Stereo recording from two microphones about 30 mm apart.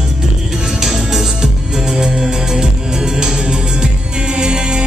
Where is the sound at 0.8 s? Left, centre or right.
Centre.